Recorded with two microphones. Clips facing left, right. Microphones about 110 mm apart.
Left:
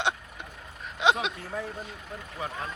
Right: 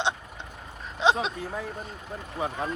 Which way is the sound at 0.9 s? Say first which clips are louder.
Right 1 dB; 35° right (ahead or behind).